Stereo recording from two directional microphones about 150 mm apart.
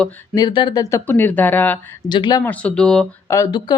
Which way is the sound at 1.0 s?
10° left (ahead or behind).